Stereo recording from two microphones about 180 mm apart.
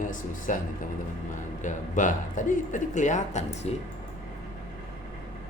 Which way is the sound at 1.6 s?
45° left (ahead or behind).